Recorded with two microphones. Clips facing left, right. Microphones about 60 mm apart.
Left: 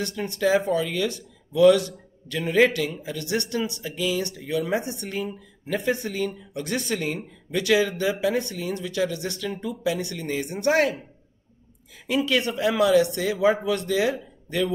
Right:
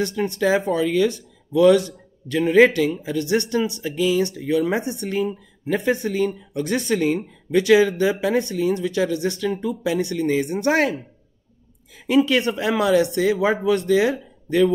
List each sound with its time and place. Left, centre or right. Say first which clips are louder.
0.4 s speech: right 1 dB; right
12.1 s speech: right 5 dB; right